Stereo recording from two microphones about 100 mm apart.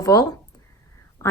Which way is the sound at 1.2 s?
25° left (ahead or behind).